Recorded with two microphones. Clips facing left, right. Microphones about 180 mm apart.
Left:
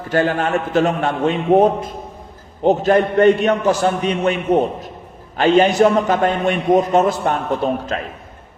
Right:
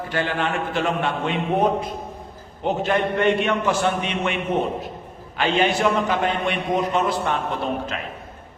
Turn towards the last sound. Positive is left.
turn(degrees=40)  # may be behind; listen again after turning